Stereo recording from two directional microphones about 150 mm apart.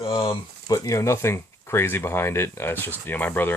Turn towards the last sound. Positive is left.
turn(degrees=15)  # may be behind; listen again after turning